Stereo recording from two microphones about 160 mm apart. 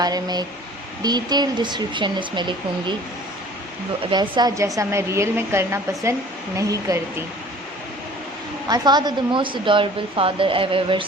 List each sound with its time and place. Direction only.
0.0 s a woman's voice: 25° right (ahead or behind)
4.1 s a woman's voice: 25° right (ahead or behind)
8.6 s a woman's voice: 25° right (ahead or behind)